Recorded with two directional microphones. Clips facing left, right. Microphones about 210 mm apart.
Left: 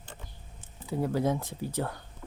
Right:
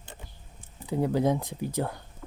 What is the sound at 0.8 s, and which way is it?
Speech, 15° right (ahead or behind).